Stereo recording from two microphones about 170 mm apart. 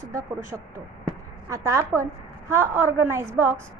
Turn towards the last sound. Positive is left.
turn(degrees=-15)  # may be behind; listen again after turning